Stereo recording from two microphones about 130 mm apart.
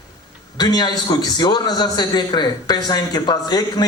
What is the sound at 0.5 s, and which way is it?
A man's voice, 30° left (ahead or behind).